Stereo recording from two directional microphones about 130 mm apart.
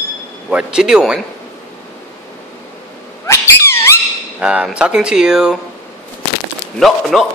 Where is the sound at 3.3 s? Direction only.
20° left (ahead or behind).